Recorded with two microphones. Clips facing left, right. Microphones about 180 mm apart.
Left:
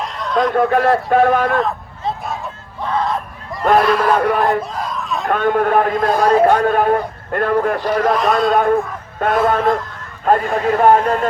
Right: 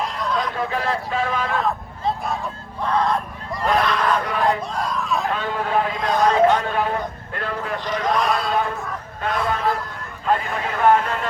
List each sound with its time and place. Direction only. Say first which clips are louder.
0.0 s a sound: even; centre (ahead or behind)
0.3 s a man's voice: left 13 dB; 50° left (ahead or behind)
1.6 s a sound: left 1 dB; centre (ahead or behind)
3.8 s speech: left 7 dB; 5° left (ahead or behind)
4.1 s a man's voice: left 6 dB; 55° left (ahead or behind)
4.6 s speech: left 1 dB; centre (ahead or behind)
5.3 s a man's voice: left 8 dB; 55° left (ahead or behind)
6.1 s speech: left 2 dB; 10° left (ahead or behind)
6.4 s speech: left 5 dB; 55° left (ahead or behind)
8.1 s speech: left 5 dB; centre (ahead or behind)
8.4 s a man's voice: left 9 dB; 55° left (ahead or behind)